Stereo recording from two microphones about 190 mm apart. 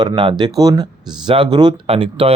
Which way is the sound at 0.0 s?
25° right (ahead or behind).